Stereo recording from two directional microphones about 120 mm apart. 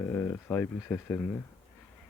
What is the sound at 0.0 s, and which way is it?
Speech, 20° left (ahead or behind).